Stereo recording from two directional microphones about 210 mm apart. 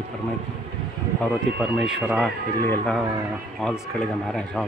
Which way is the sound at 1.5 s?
5° right (ahead or behind).